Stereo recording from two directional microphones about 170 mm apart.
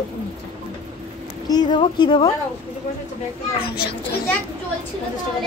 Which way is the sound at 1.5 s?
25° left (ahead or behind).